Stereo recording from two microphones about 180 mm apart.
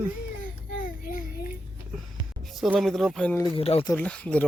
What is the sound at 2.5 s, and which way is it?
Speech, centre (ahead or behind).